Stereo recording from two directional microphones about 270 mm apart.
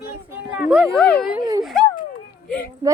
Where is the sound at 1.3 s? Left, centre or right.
Centre.